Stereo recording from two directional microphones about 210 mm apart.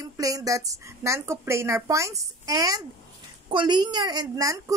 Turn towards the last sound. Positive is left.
turn(degrees=-15)  # may be behind; listen again after turning